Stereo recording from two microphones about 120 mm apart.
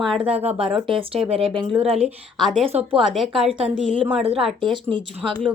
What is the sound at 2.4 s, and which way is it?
Speech, centre (ahead or behind).